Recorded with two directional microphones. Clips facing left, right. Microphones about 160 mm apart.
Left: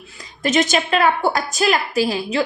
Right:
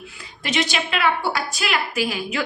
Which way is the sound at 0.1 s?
40° left (ahead or behind).